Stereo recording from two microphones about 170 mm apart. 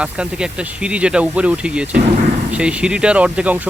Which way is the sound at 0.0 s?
5° right (ahead or behind).